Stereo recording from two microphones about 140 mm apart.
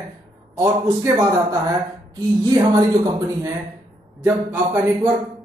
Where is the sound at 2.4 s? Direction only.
30° right (ahead or behind).